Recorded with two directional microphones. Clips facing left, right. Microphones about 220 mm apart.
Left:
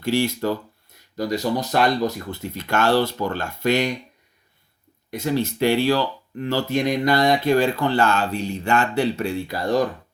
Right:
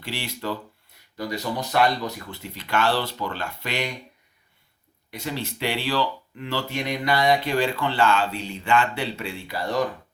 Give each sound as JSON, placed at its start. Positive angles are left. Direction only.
{"t": 0.0, "sound": "speech", "side_deg": 45}
{"t": 5.1, "sound": "speech", "side_deg": 45}